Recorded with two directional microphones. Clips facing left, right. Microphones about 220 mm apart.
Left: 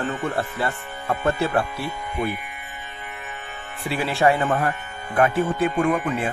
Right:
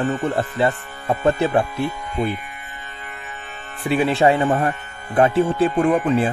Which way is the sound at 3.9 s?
20° right (ahead or behind).